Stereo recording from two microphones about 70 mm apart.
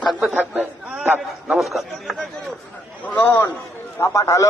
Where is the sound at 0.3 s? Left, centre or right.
Right.